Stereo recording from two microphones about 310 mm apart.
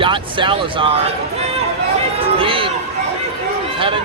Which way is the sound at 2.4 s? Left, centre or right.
Centre.